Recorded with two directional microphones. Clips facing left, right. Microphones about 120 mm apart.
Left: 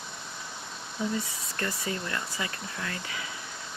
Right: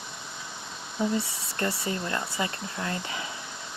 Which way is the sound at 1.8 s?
25° right (ahead or behind).